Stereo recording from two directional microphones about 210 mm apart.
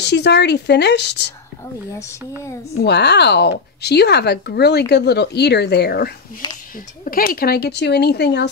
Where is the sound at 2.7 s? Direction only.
55° left (ahead or behind).